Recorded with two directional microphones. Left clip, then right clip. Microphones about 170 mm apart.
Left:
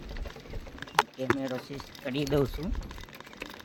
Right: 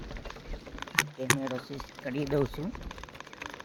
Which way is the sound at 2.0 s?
20° left (ahead or behind).